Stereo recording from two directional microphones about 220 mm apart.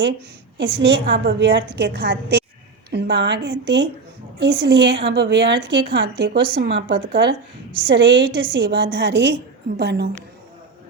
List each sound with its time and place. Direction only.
0.6 s a woman's voice: 50° right (ahead or behind)